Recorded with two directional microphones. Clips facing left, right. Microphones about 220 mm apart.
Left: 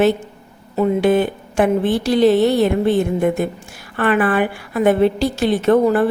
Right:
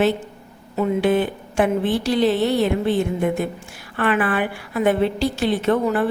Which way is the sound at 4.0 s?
45° left (ahead or behind).